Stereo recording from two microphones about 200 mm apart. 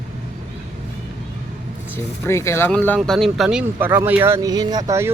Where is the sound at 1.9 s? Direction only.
15° left (ahead or behind).